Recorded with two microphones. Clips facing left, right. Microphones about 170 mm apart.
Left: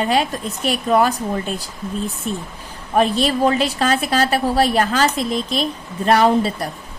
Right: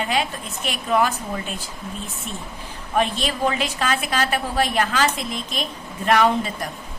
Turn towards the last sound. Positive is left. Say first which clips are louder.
# left 4 dB
turn(degrees=35)  # may be behind; listen again after turning